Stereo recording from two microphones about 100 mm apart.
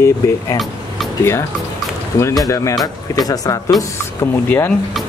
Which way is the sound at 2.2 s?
30° left (ahead or behind).